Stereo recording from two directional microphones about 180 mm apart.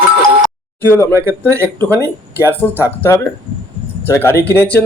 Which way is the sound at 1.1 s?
15° right (ahead or behind).